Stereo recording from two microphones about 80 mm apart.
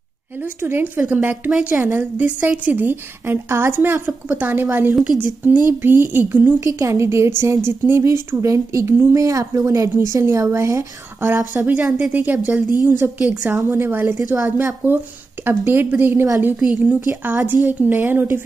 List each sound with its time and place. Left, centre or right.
0.6 s a woman's voice: right
6.6 s a woman's voice: right
11.1 s a woman's voice: right